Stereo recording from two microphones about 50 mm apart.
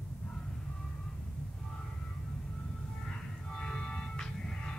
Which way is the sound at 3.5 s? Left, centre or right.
Centre.